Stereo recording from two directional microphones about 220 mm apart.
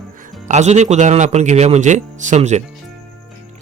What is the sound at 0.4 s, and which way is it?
Speech, 30° right (ahead or behind).